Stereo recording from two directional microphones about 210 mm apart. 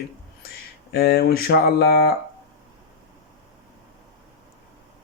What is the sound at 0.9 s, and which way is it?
Speech, 50° left (ahead or behind).